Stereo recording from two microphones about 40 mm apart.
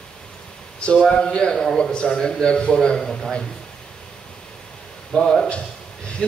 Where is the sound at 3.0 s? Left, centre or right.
Centre.